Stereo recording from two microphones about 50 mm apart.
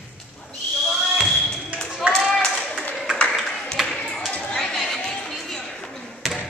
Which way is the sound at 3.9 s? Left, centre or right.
Centre.